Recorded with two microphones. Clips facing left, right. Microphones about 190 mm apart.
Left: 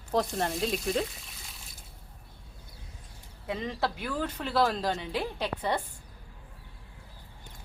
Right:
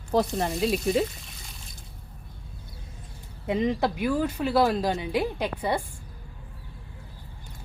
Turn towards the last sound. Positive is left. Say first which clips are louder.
# right 3 dB
turn(degrees=-10)  # may be behind; listen again after turning